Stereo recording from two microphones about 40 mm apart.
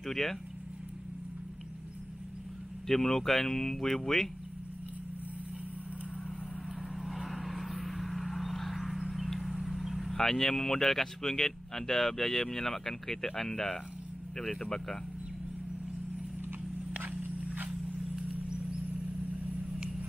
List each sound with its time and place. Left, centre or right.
0.0 s vehicle: centre
2.9 s speech: centre
7.0 s vehicle: centre
10.1 s speech: centre